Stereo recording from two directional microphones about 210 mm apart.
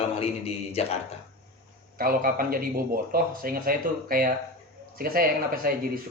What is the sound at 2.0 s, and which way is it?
Speech, 45° right (ahead or behind).